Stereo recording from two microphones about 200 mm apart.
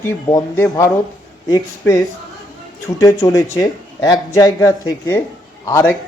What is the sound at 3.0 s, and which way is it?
Speech, 15° left (ahead or behind).